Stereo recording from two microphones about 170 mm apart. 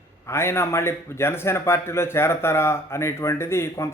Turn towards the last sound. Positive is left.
turn(degrees=15)  # may be behind; listen again after turning